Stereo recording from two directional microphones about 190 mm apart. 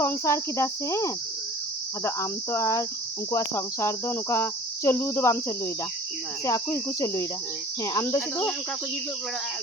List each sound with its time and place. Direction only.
0.0 s cricket: 15° left (ahead or behind)